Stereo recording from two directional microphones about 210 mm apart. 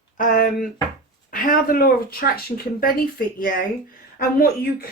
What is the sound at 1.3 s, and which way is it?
Speech, 40° left (ahead or behind).